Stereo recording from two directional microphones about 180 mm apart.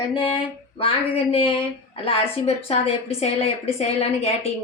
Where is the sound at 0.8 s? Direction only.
30° left (ahead or behind).